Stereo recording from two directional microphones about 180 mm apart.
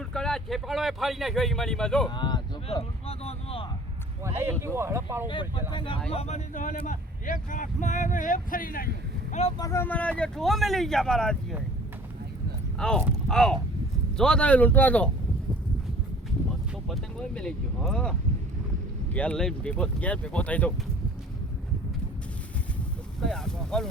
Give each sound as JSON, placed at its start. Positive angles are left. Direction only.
{"t": 0.1, "sound": "speech", "side_deg": 5}
{"t": 2.0, "sound": "a sound", "side_deg": 25}
{"t": 4.6, "sound": "speech", "side_deg": -15}
{"t": 5.3, "sound": "speech", "side_deg": 25}
{"t": 9.3, "sound": "speech", "side_deg": 35}
{"t": 9.6, "sound": "speech", "side_deg": 15}
{"t": 12.8, "sound": "speech", "side_deg": 5}
{"t": 16.9, "sound": "speech", "side_deg": 5}
{"t": 23.2, "sound": "speech", "side_deg": 5}